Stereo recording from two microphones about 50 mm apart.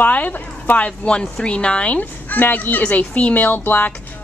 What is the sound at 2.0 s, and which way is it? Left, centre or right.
A woman's voice, left.